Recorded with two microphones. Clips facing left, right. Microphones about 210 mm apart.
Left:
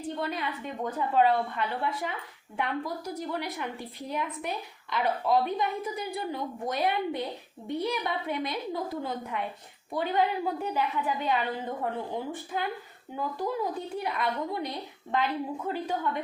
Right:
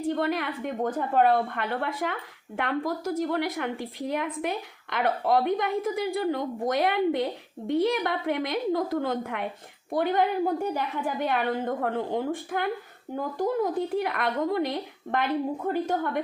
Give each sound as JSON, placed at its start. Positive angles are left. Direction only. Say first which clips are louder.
{"t": 0.1, "sound": "a woman's voice", "louder": "right 5 dB", "side_deg": -70}
{"t": 2.6, "sound": "speech", "louder": "right 4 dB", "side_deg": -90}
{"t": 3.0, "sound": "a woman's voice", "louder": "right 7 dB", "side_deg": -50}
{"t": 9.9, "sound": "a woman's voice", "louder": "right 3 dB", "side_deg": -55}
{"t": 13.9, "sound": "a woman's voice", "louder": "right 4 dB", "side_deg": -65}